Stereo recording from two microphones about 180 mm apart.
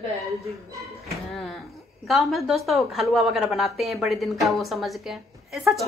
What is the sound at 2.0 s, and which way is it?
Speech, centre (ahead or behind).